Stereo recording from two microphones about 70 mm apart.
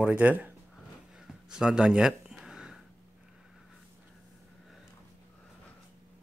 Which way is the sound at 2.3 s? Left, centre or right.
Centre.